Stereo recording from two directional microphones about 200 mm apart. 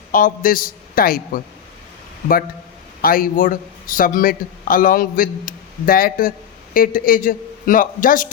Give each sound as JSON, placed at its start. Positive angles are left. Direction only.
{"t": 0.1, "sound": "a man's voice", "side_deg": 45}
{"t": 3.0, "sound": "a man's voice", "side_deg": 45}